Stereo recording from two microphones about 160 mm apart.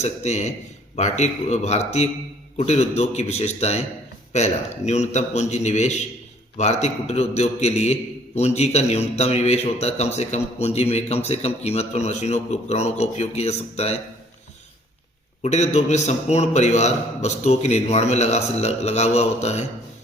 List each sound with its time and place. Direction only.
0.0 s a man's voice: 45° left (ahead or behind)
15.4 s a man's voice: 45° left (ahead or behind)